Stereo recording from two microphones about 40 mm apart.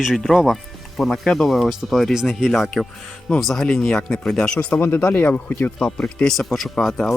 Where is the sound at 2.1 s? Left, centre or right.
Centre.